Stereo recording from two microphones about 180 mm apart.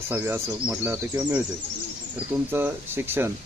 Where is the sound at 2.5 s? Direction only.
10° right (ahead or behind).